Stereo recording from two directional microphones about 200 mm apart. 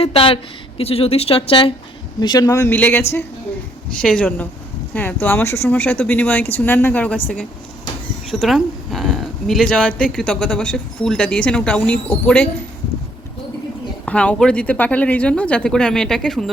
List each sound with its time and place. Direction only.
0.0 s speech: 30° left (ahead or behind); by 7.2 s 5° left (ahead or behind)
8.3 s speech: centre (ahead or behind)
14.0 s speech: 5° left (ahead or behind)